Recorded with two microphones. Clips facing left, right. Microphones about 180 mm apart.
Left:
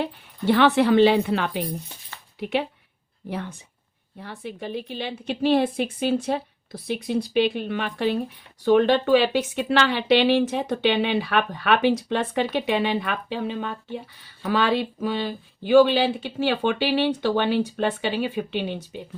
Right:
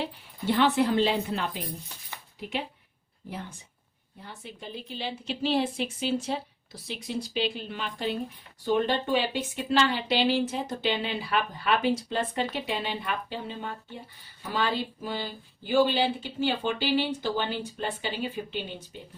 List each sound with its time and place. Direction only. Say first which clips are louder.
0.0 s speech: left 6 dB; 70° left (ahead or behind)
2.4 s speech: left 8 dB; 70° left (ahead or behind)
4.2 s speech: left 8 dB; 65° left (ahead or behind)
8.6 s speech: left 8 dB; 80° left